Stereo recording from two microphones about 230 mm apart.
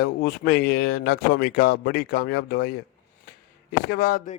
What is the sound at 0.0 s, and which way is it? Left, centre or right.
Speech, left.